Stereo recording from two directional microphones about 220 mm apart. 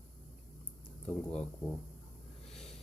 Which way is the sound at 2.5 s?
Centre (ahead or behind).